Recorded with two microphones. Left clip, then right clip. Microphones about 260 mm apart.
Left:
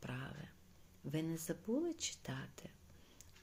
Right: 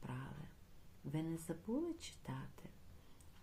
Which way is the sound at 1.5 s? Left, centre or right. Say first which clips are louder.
Left 4 dB; centre.